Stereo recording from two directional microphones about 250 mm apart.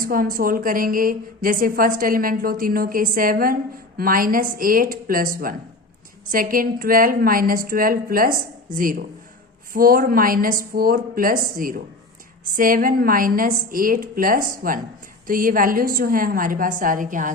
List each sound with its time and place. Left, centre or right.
0.0 s a woman's voice: right